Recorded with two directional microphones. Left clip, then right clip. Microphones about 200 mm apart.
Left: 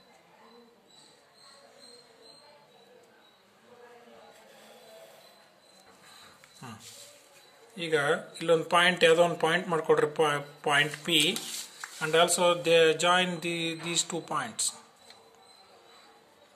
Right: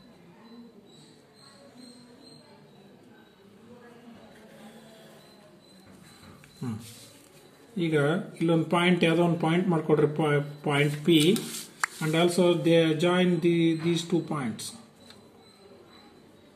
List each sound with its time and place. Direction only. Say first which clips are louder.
7.7 s speech: right 1 dB; 25° left (ahead or behind)